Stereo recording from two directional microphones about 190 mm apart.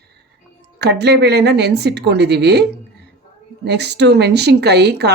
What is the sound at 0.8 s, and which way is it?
A woman's voice, 60° right (ahead or behind).